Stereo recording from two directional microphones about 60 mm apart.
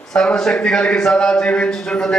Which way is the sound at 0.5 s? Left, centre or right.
Centre.